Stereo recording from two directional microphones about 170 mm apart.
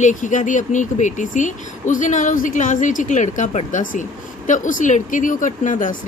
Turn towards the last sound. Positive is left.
turn(degrees=50)  # may be behind; listen again after turning